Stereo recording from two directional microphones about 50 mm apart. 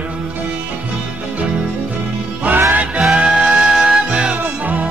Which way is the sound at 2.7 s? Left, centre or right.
Right.